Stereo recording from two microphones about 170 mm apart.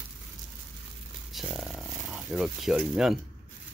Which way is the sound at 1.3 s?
Centre (ahead or behind).